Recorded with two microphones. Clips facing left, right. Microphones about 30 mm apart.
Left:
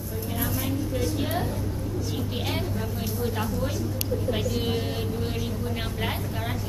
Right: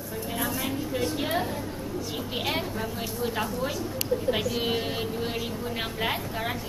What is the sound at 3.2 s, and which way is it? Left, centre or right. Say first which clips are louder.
A man's voice: even; centre.